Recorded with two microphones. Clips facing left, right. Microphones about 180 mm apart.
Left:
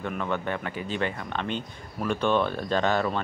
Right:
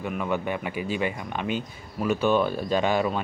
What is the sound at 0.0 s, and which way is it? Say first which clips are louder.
Speech: right 2 dB; 10° right (ahead or behind).